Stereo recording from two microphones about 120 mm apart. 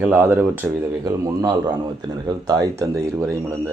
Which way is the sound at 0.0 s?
15° right (ahead or behind).